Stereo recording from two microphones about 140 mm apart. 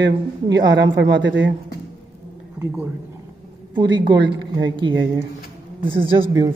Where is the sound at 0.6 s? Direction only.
30° right (ahead or behind).